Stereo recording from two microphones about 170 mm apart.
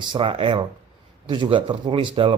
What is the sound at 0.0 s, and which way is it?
Speech, 30° right (ahead or behind).